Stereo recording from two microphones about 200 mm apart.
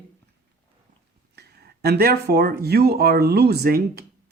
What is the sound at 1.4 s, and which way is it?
Speech, 55° right (ahead or behind).